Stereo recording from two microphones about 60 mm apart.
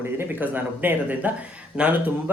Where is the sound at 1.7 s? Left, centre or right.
Centre.